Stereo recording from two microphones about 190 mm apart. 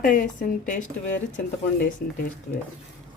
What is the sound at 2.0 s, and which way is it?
Speech, 55° left (ahead or behind).